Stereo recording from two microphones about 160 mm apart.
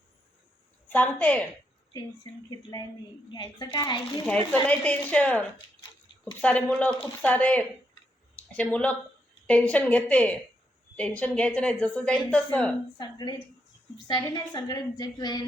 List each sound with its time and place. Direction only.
0.9 s speech: 10° left (ahead or behind)
2.5 s a woman's voice: 25° left (ahead or behind)
4.3 s speech: 10° left (ahead or behind)
13.0 s a woman's voice: 25° left (ahead or behind)